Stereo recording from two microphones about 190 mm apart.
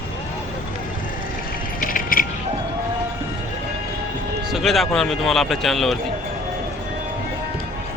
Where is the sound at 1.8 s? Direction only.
45° left (ahead or behind).